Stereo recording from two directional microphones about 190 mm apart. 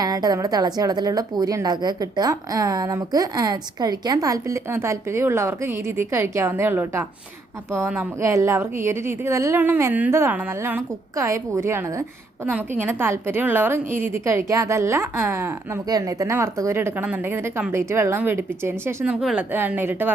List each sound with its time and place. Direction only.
0.0 s a woman's voice: 20° right (ahead or behind)